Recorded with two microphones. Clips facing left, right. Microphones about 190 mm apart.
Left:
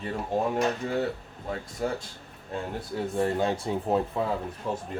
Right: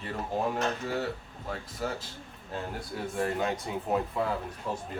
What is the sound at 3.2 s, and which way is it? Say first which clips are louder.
Speech: left 4 dB; 30° left (ahead or behind).